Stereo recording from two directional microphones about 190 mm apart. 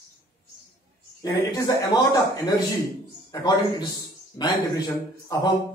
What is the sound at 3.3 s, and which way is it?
Speech, 20° left (ahead or behind).